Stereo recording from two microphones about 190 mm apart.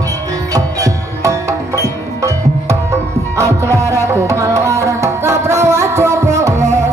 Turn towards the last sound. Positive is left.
turn(degrees=-15)  # may be behind; listen again after turning